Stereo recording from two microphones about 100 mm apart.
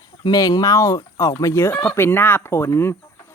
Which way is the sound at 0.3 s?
40° left (ahead or behind).